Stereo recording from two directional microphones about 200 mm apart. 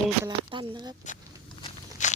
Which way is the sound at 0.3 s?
25° right (ahead or behind).